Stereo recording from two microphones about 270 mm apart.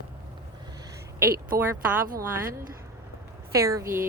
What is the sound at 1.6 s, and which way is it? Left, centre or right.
Speech, centre.